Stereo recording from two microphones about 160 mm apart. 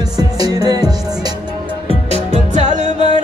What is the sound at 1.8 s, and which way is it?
Music, 45° right (ahead or behind).